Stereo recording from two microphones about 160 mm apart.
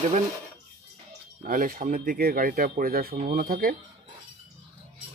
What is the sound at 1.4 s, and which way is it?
Speech, 60° right (ahead or behind).